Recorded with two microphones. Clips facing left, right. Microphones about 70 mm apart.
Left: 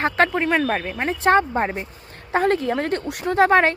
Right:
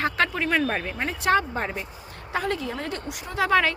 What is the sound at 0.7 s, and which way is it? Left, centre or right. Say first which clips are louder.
Speech: left 5 dB; left.